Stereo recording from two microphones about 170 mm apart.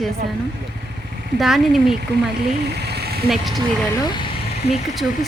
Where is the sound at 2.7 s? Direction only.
75° right (ahead or behind).